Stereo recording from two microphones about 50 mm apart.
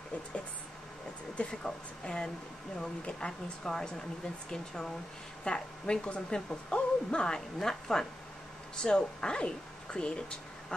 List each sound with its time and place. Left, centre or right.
1.3 s a woman's voice: centre